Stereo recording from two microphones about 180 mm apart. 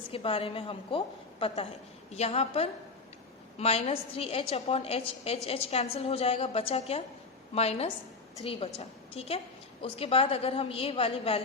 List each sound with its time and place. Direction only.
0.1 s a woman's voice: 30° left (ahead or behind)